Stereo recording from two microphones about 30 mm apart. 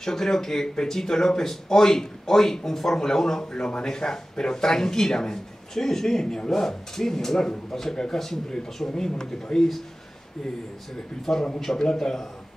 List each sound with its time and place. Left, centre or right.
0.0 s a man's voice: centre
6.2 s speech: left
6.5 s a man's voice: centre
11.3 s a man's voice: centre